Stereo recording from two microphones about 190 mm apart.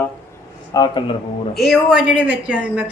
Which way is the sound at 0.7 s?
25° left (ahead or behind).